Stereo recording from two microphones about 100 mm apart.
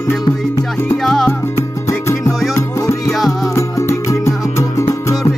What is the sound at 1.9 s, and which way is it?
Music, 30° left (ahead or behind).